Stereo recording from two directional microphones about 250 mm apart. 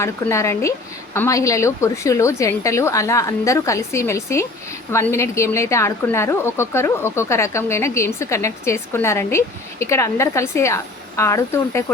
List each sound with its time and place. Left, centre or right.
0.0 s a woman's voice: centre